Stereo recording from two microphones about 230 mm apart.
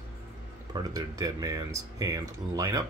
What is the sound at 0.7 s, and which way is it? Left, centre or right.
Speech, centre.